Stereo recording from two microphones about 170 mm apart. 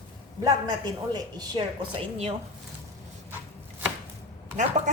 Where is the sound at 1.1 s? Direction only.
25° right (ahead or behind).